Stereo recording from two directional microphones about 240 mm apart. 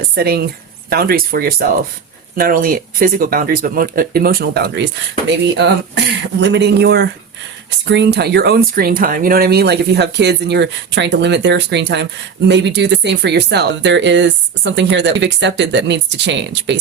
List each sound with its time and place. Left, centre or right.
0.2 s speech: right
6.4 s speech: right